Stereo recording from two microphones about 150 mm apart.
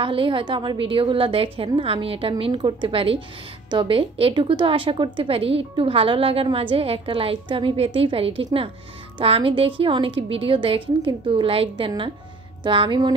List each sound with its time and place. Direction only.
0.0 s a woman's voice: 35° right (ahead or behind)